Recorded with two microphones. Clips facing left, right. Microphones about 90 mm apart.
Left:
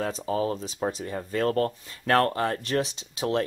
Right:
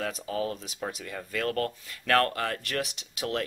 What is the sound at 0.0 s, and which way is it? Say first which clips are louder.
Speech: left 4 dB; 30° left (ahead or behind).